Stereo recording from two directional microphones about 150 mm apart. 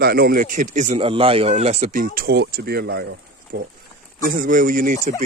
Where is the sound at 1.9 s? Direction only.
70° right (ahead or behind); by 3.0 s 90° right.